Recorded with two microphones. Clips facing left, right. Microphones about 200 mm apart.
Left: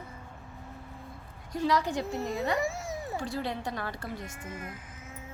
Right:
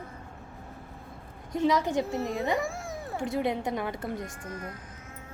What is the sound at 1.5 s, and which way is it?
Speech, 20° right (ahead or behind).